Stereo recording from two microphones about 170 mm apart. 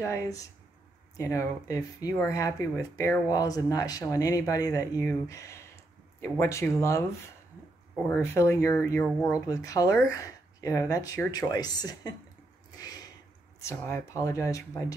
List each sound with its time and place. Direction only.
0.0 s speech: 20° left (ahead or behind)
8.1 s speech: 15° left (ahead or behind)
12.7 s a sound: 25° left (ahead or behind)
13.6 s speech: 15° left (ahead or behind)